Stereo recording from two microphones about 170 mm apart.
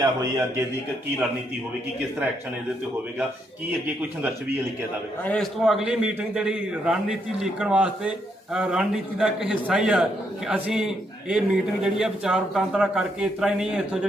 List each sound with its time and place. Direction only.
0.0 s a man's voice: 20° right (ahead or behind)
5.2 s a man's voice: 5° left (ahead or behind)